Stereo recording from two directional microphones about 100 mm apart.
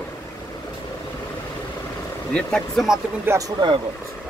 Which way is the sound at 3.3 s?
20° right (ahead or behind).